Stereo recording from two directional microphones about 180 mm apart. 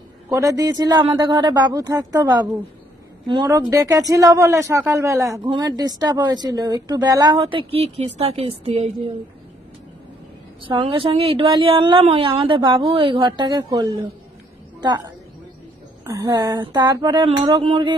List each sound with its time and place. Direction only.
0.3 s a woman's voice: 20° right (ahead or behind); by 9.1 s 35° right (ahead or behind)
10.6 s a woman's voice: 30° right (ahead or behind)
16.1 s a woman's voice: 20° right (ahead or behind)